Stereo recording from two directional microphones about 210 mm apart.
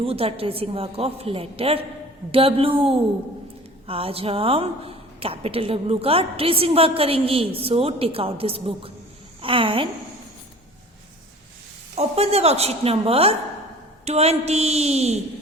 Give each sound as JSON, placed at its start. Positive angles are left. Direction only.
{"t": 0.0, "sound": "a woman's voice", "side_deg": -25}
{"t": 3.8, "sound": "a woman's voice", "side_deg": -25}
{"t": 11.9, "sound": "a woman's voice", "side_deg": -30}